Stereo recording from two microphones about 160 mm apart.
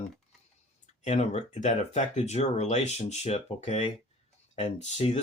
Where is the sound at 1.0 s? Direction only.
45° left (ahead or behind).